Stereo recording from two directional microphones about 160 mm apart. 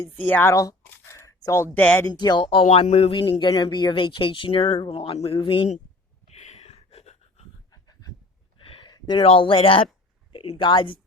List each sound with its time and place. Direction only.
0.1 s speech: 10° left (ahead or behind)
2.0 s speech: 25° left (ahead or behind); by 3.2 s 40° left (ahead or behind)
3.2 s speech: 25° left (ahead or behind)
6.2 s a sound: 45° left (ahead or behind)
7.7 s a sound: 25° left (ahead or behind)
10.3 s speech: 35° left (ahead or behind)